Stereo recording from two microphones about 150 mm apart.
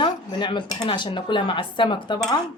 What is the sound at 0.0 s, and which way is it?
Dishes, 30° left (ahead or behind).